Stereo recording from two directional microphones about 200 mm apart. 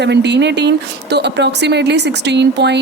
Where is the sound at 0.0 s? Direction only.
60° right (ahead or behind).